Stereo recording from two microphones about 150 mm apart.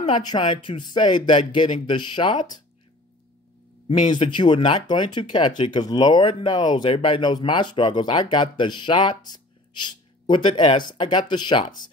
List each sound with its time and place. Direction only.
0.0 s speech: 30° left (ahead or behind)
4.1 s speech: 30° left (ahead or behind)